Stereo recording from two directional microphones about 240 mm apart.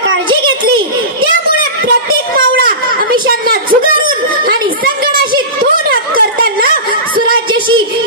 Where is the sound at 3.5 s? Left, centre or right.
Right.